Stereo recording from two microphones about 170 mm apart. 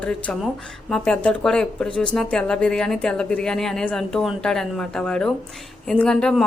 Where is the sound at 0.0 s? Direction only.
5° left (ahead or behind).